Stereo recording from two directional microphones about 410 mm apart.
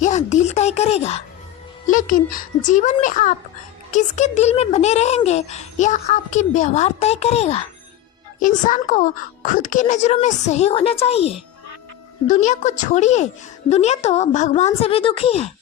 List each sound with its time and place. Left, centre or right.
0.0 s a child's voice: centre